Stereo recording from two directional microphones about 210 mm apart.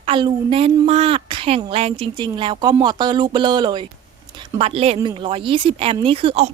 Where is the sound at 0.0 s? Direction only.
25° right (ahead or behind).